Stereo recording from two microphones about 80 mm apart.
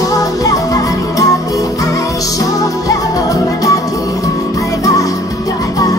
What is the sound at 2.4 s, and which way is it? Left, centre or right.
Music, left.